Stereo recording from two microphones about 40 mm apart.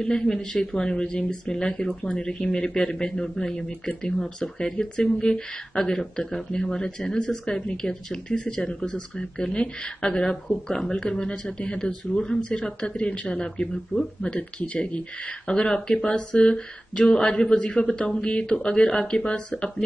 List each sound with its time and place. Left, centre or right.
0.0 s speech: centre
12.2 s speech: centre
14.6 s speech: left